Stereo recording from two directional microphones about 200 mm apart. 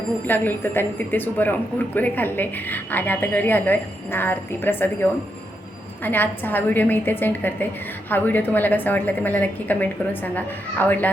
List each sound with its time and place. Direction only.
0.3 s a woman's voice: 10° left (ahead or behind)